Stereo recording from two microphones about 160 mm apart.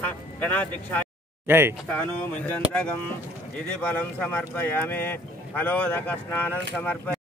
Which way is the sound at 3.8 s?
10° left (ahead or behind).